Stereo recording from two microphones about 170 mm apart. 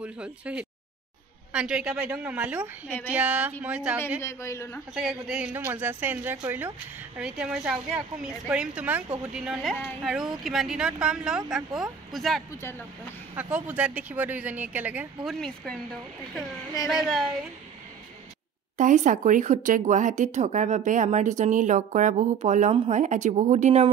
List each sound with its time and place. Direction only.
0.0 s speech: 5° right (ahead or behind)
4.2 s a woman's voice: 15° left (ahead or behind)
4.9 s speech: centre (ahead or behind)
15.2 s speech: 5° left (ahead or behind)
16.9 s speech: centre (ahead or behind)
18.8 s speech: 45° right (ahead or behind)